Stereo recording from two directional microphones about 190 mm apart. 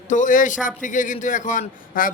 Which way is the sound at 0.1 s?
45° left (ahead or behind).